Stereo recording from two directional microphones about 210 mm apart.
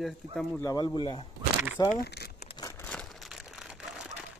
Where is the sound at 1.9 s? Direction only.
50° left (ahead or behind).